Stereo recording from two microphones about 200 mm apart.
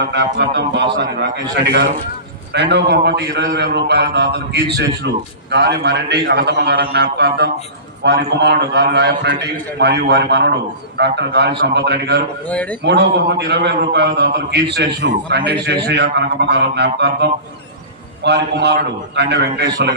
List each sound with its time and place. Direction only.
0.0 s a man's voice: 60° right (ahead or behind)
2.5 s a man's voice: 60° right (ahead or behind)